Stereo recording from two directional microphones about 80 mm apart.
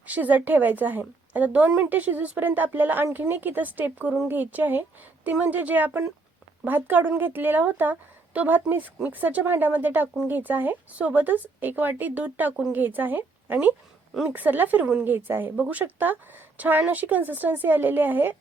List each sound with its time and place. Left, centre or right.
0.0 s speech: centre